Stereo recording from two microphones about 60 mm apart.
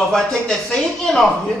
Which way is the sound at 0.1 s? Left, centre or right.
Centre.